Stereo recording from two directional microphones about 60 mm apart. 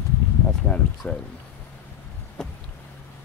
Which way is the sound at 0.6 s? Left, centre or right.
Centre.